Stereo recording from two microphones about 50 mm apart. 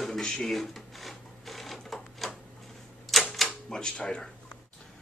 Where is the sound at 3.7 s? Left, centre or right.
Centre.